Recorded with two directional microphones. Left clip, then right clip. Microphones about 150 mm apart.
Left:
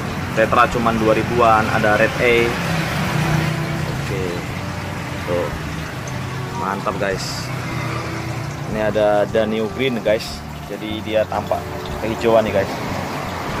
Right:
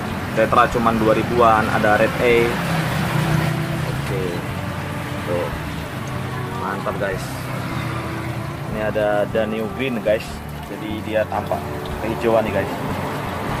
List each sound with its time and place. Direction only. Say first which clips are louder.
0.4 s speech: left 1 dB; 5° right (ahead or behind)
8.8 s speech: left 3 dB; 25° left (ahead or behind); by 12.4 s 10° left (ahead or behind)